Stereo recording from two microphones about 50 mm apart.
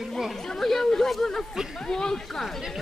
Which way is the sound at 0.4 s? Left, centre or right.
Centre.